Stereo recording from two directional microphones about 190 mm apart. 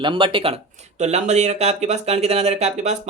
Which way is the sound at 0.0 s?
25° right (ahead or behind).